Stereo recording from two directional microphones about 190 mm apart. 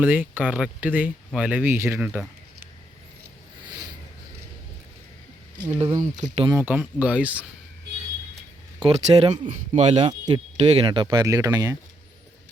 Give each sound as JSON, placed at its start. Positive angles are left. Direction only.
{"t": 0.0, "sound": "speech", "side_deg": -10}
{"t": 5.6, "sound": "speech", "side_deg": -20}
{"t": 6.1, "sound": "speech", "side_deg": -30}
{"t": 6.5, "sound": "speech", "side_deg": -10}
{"t": 8.8, "sound": "speech", "side_deg": -30}
{"t": 10.1, "sound": "speech", "side_deg": -25}